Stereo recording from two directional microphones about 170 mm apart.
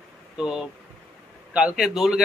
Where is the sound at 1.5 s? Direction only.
5° right (ahead or behind).